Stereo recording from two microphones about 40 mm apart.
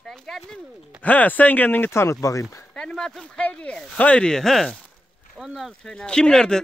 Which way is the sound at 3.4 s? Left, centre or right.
Left.